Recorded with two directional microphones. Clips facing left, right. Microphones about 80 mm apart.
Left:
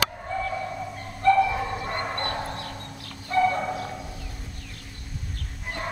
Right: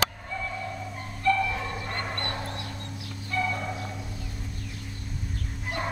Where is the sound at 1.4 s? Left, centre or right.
Left.